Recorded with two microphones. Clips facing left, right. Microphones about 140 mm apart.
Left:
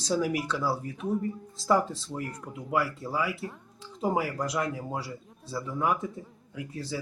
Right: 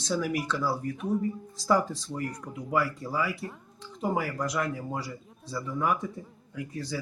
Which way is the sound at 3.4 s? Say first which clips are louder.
Even; centre (ahead or behind).